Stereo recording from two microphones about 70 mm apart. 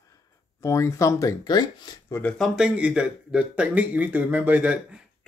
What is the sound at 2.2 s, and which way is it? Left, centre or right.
Speech, left.